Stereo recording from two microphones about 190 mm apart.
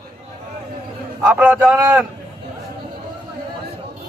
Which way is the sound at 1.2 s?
5° right (ahead or behind).